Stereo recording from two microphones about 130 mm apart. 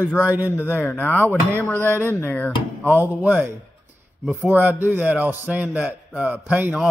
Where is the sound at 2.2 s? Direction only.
15° left (ahead or behind).